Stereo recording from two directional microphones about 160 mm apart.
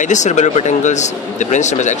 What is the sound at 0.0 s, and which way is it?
Speech, 50° left (ahead or behind).